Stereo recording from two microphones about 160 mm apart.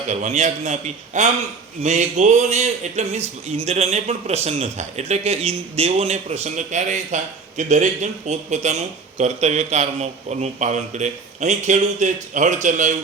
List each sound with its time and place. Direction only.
0.1 s a man's voice: 45° right (ahead or behind)